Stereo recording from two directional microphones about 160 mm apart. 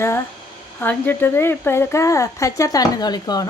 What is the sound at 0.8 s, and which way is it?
Speech, 10° left (ahead or behind).